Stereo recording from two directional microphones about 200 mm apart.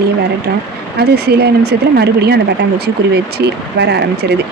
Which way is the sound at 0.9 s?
55° right (ahead or behind).